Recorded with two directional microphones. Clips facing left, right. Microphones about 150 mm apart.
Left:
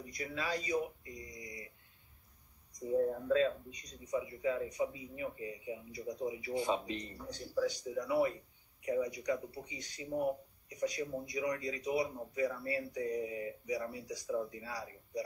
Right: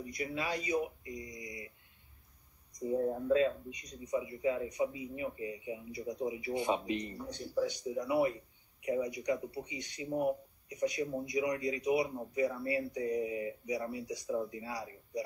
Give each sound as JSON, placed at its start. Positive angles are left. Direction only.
{"t": 0.1, "sound": "speech", "side_deg": -20}
{"t": 3.1, "sound": "speech", "side_deg": -15}